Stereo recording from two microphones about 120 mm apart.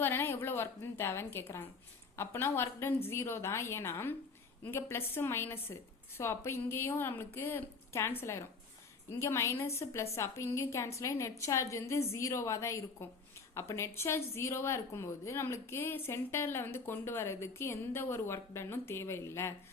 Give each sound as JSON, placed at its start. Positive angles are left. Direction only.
{"t": 0.0, "sound": "a woman's voice", "side_deg": 20}